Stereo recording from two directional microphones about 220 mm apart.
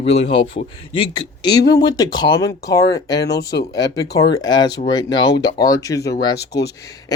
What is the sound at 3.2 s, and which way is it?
Speech, 50° left (ahead or behind).